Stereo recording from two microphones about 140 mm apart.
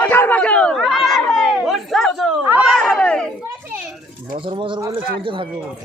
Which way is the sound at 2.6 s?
5° left (ahead or behind).